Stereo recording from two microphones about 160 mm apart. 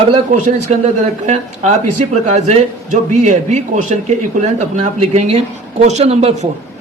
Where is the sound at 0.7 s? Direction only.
45° right (ahead or behind).